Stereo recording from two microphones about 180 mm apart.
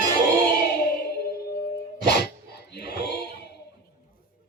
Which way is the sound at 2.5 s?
65° left (ahead or behind).